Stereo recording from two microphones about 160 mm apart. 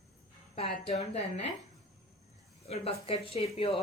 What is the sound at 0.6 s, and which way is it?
Speech, 40° left (ahead or behind).